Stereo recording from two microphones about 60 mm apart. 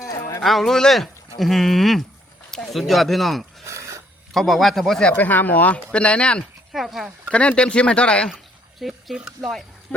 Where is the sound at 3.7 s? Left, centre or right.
Right.